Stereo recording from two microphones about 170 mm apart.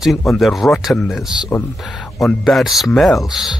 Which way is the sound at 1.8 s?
Centre (ahead or behind).